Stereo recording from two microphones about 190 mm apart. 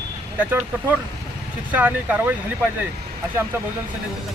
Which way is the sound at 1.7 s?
10° right (ahead or behind).